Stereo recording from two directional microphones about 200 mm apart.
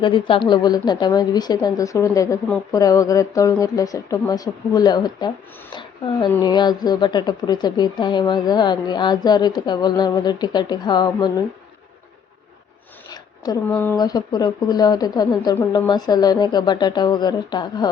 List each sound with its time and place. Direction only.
0.0 s a woman's voice: 25° left (ahead or behind)
13.7 s a woman's voice: 10° left (ahead or behind)